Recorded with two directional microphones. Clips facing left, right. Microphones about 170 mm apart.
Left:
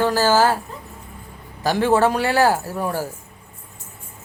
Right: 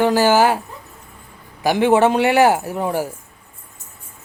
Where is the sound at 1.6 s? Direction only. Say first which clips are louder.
Right 3 dB; 20° right (ahead or behind).